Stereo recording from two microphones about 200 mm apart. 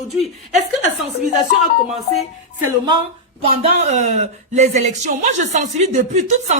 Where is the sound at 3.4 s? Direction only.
30° right (ahead or behind).